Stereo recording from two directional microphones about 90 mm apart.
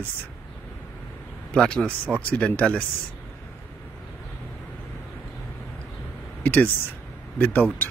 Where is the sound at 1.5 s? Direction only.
10° left (ahead or behind).